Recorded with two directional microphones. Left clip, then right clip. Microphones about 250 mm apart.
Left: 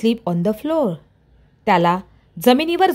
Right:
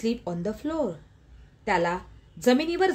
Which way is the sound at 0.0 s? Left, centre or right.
Left.